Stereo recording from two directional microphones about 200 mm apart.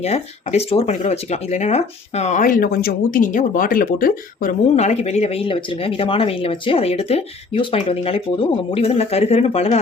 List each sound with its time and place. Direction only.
0.0 s speech: 30° left (ahead or behind)